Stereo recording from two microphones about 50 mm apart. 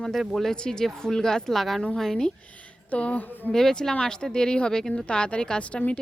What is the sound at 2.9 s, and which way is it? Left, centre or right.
Speech, left.